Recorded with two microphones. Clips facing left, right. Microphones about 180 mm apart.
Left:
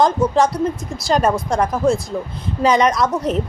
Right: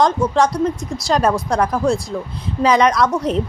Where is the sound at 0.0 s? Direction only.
Centre (ahead or behind).